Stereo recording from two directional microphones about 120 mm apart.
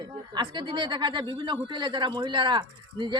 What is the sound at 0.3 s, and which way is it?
Speech, 40° right (ahead or behind).